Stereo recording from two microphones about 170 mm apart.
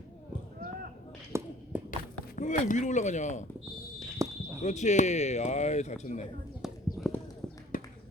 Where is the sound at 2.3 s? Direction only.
50° left (ahead or behind).